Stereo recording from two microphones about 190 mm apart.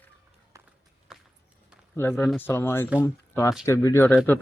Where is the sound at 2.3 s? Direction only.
10° left (ahead or behind).